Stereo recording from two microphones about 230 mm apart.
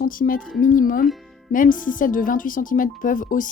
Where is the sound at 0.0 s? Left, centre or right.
Left.